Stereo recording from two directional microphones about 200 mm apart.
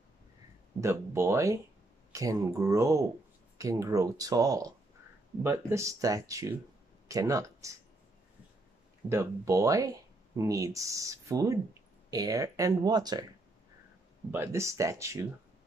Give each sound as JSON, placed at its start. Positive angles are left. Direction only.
{"t": 0.7, "sound": "speech", "side_deg": -15}
{"t": 9.1, "sound": "speech", "side_deg": -15}
{"t": 14.3, "sound": "speech", "side_deg": -15}